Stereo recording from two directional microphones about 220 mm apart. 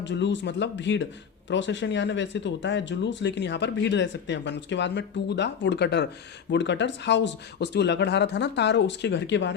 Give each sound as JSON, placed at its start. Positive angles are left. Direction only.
{"t": 0.0, "sound": "speech", "side_deg": 55}